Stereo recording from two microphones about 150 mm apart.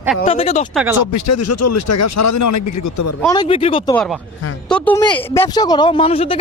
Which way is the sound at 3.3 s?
35° left (ahead or behind).